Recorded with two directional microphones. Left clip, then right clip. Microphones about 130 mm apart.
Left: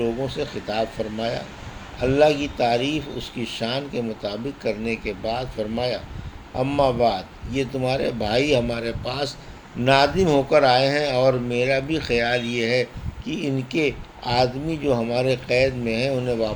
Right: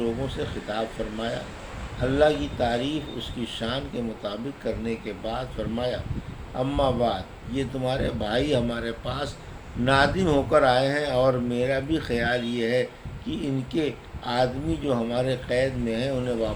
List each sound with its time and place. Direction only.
0.0 s speech: 40° left (ahead or behind)